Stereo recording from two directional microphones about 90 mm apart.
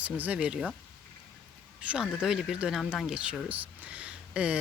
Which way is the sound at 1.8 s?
15° right (ahead or behind).